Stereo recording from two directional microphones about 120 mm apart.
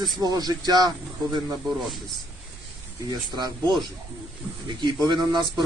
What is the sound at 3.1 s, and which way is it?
Speech, 35° right (ahead or behind).